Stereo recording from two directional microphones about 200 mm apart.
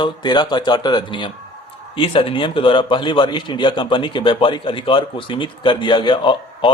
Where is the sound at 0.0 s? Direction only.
20° left (ahead or behind).